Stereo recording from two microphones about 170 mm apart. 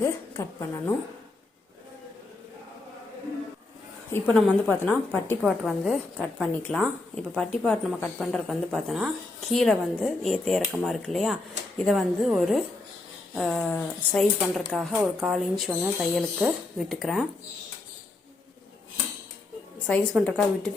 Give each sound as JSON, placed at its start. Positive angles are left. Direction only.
{"t": 0.0, "sound": "a woman's voice", "side_deg": 15}
{"t": 4.1, "sound": "a woman's voice", "side_deg": 10}
{"t": 5.4, "sound": "speech", "side_deg": 0}
{"t": 19.9, "sound": "speech", "side_deg": 5}